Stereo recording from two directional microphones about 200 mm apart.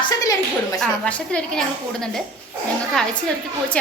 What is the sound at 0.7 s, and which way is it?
Speech, 5° left (ahead or behind).